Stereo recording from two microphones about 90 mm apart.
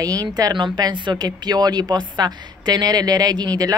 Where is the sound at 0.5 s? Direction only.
55° right (ahead or behind).